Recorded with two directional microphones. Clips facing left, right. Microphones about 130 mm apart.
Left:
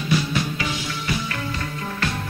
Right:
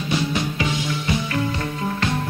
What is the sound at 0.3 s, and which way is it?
Music, 20° right (ahead or behind).